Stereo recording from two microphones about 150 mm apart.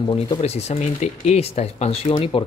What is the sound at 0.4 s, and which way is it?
Speech, 45° left (ahead or behind).